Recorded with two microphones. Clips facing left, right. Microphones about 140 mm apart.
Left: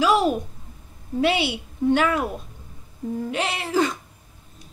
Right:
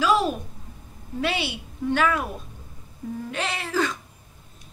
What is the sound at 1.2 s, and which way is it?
A woman's voice, 20° left (ahead or behind).